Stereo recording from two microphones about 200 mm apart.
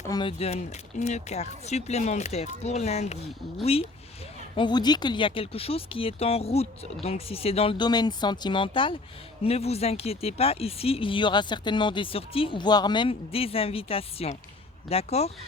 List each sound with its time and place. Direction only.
0.0 s speech: 20° left (ahead or behind)